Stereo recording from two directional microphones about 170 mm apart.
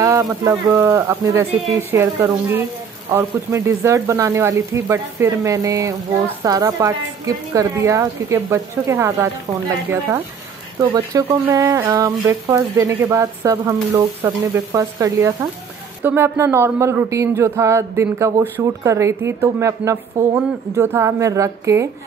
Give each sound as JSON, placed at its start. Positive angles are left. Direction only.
{"t": 0.0, "sound": "speech", "side_deg": -20}